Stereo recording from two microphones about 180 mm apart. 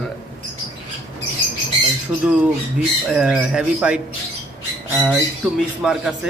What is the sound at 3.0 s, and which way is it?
Speech, 5° right (ahead or behind).